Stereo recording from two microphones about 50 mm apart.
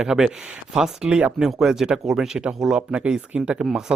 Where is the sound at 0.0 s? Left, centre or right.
Centre.